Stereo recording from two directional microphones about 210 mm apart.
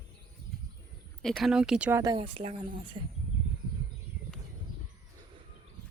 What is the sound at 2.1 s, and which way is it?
Speech, 25° right (ahead or behind).